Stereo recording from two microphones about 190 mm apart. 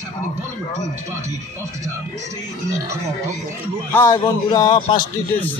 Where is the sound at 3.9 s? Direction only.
15° left (ahead or behind).